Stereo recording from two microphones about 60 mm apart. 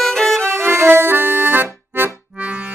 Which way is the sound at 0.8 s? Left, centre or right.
Right.